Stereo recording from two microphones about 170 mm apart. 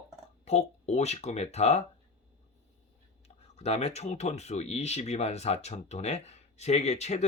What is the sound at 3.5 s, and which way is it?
Speech, 40° left (ahead or behind).